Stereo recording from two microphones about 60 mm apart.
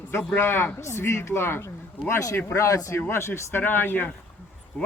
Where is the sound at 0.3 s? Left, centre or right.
Left.